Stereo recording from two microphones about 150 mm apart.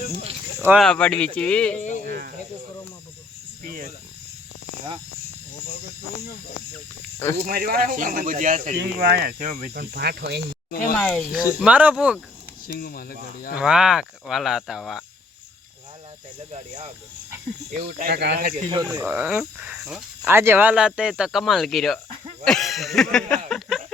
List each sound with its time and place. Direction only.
0.8 s speech: 5° left (ahead or behind)
7.4 s speech: 85° right
10.7 s speech: 70° left (ahead or behind)
10.9 s speech: 10° left (ahead or behind)
11.6 s speech: 10° right (ahead or behind)
12.6 s speech: 90° left
13.6 s speech: 5° right (ahead or behind)
17.7 s speech: 75° right (ahead or behind)
18.9 s speech: 10° right (ahead or behind)
20.2 s speech: 15° right (ahead or behind); by 23.8 s centre (ahead or behind)